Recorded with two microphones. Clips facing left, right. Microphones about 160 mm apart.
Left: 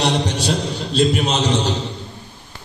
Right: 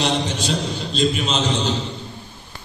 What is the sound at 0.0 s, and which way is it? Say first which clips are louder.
A man's voice: left 2 dB; 70° left (ahead or behind).